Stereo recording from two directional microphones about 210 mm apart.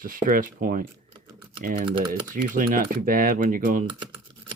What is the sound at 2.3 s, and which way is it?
Speech, 40° right (ahead or behind).